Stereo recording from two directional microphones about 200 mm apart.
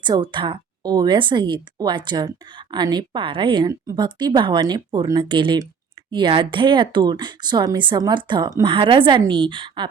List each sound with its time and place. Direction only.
0.0 s a woman's voice: 20° right (ahead or behind)